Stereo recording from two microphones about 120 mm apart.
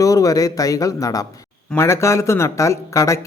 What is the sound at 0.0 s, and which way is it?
Speech, 30° left (ahead or behind).